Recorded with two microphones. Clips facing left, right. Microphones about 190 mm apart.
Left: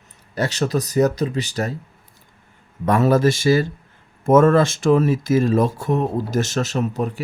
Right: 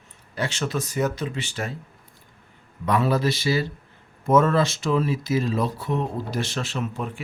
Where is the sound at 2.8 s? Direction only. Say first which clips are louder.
Left 6 dB; 45° left (ahead or behind).